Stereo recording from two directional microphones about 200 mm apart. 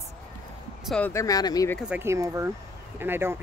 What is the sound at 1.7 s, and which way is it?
Speech, 5° right (ahead or behind).